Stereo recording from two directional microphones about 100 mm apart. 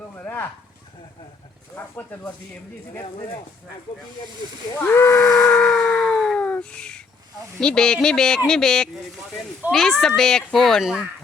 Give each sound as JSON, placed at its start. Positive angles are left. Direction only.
{"t": 0.2, "sound": "fowl", "side_deg": 20}
{"t": 1.7, "sound": "speech", "side_deg": 15}
{"t": 4.8, "sound": "steam whistle", "side_deg": 25}
{"t": 5.4, "sound": "speech", "side_deg": 15}
{"t": 5.6, "sound": "a sound", "side_deg": 5}
{"t": 7.6, "sound": "a child's voice", "side_deg": 5}